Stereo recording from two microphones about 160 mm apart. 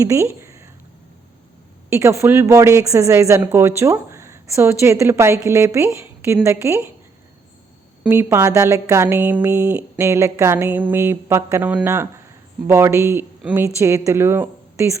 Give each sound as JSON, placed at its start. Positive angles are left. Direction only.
{"t": 0.0, "sound": "a sound", "side_deg": -15}
{"t": 1.9, "sound": "speech", "side_deg": -15}
{"t": 8.0, "sound": "speech", "side_deg": -15}